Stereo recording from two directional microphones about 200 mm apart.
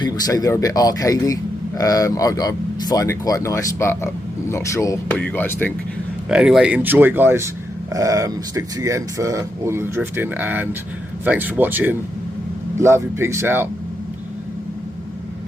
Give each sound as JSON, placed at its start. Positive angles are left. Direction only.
{"t": 0.0, "sound": "speech", "side_deg": 15}
{"t": 6.2, "sound": "speech", "side_deg": -5}